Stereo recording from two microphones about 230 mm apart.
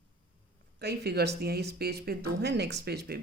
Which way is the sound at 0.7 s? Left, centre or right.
Right.